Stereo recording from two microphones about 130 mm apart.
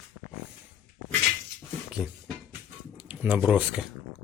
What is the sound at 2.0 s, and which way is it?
Speech, 5° right (ahead or behind).